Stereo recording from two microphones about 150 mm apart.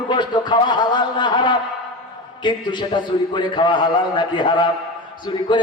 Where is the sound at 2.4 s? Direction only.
30° left (ahead or behind).